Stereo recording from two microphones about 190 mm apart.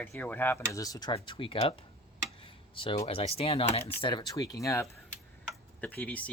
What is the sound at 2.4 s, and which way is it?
Tick-tock, 25° left (ahead or behind).